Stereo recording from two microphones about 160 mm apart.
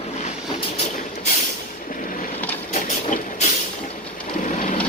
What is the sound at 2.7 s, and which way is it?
Vehicle, 45° left (ahead or behind).